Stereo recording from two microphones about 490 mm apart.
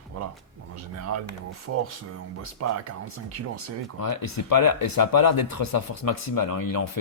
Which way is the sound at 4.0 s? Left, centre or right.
Left.